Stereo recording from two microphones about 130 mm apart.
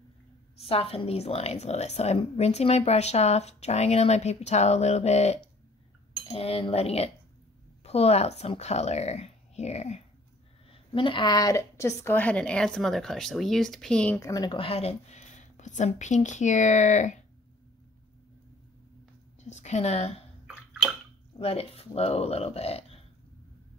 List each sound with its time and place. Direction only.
0.7 s a woman's voice: 45° left (ahead or behind)
10.7 s a woman's voice: 40° left (ahead or behind); by 14.2 s 5° left (ahead or behind)
14.2 s speech: 25° left (ahead or behind)
14.5 s a woman's voice: 45° left (ahead or behind); by 17.2 s 65° left (ahead or behind)
19.5 s a woman's voice: 60° left (ahead or behind)
20.4 s bathtub: 5° right (ahead or behind)
21.4 s speech: 50° left (ahead or behind)